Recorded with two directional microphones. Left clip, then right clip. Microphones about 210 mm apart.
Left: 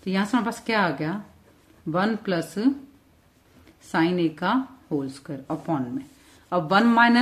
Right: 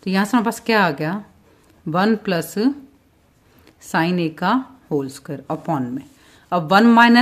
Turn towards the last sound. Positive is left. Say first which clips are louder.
# right 6 dB
turn(degrees=-40)  # may be behind; listen again after turning